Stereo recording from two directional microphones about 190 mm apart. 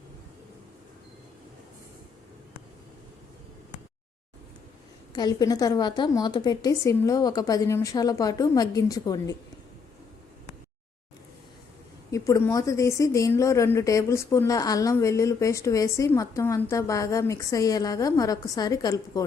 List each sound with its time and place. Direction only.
5.1 s a woman's voice: 20° left (ahead or behind)
12.1 s speech: 15° left (ahead or behind)